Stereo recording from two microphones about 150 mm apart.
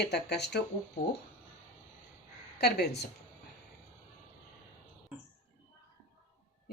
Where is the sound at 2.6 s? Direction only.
90° left.